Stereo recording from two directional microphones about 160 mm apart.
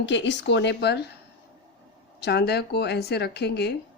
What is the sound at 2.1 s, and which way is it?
Speech, 90° left.